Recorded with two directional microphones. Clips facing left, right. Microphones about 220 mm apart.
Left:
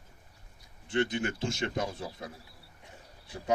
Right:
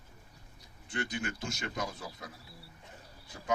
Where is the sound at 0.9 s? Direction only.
25° left (ahead or behind).